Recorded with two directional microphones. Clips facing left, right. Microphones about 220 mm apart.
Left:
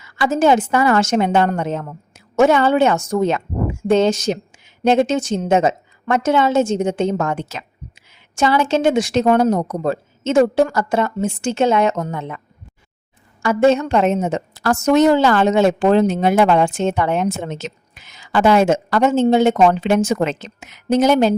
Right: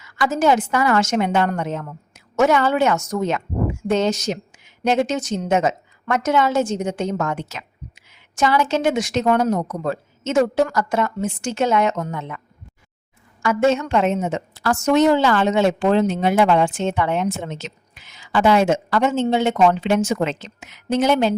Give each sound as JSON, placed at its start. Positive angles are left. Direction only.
{"t": 0.0, "sound": "a woman's voice", "side_deg": 30}
{"t": 13.4, "sound": "a woman's voice", "side_deg": 35}